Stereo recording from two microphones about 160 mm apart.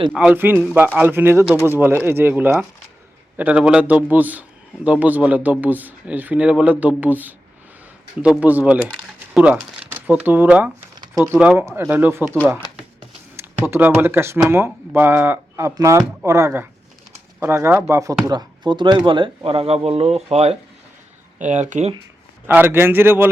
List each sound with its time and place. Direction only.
0.1 s a man's voice: 5° right (ahead or behind)
13.3 s a man's voice: 15° right (ahead or behind); by 21.9 s 45° right (ahead or behind)
22.4 s a man's voice: 15° right (ahead or behind)